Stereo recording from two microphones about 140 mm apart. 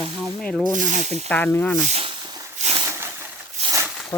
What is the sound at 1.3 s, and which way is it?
Snake, 15° left (ahead or behind).